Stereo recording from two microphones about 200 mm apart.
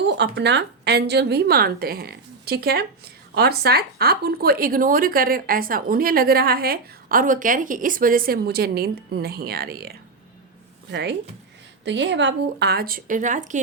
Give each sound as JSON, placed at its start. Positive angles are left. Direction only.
{"t": 0.1, "sound": "a woman's voice", "side_deg": -60}